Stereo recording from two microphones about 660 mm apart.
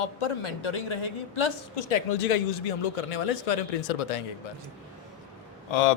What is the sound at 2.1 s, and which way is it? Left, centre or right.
Speech, left.